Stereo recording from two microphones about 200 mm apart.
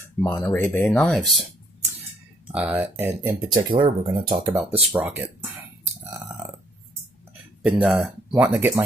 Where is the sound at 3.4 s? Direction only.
20° right (ahead or behind).